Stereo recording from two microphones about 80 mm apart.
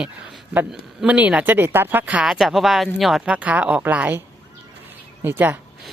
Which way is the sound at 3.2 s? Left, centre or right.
Centre.